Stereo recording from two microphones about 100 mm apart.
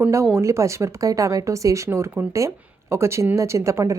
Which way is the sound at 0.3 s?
30° right (ahead or behind).